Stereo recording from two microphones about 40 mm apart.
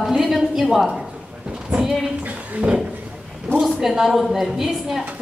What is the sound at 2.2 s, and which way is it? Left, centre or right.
Speech, right.